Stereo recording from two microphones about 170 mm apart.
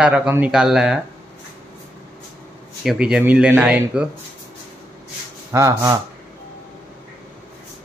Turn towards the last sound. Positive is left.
turn(degrees=-15)  # may be behind; listen again after turning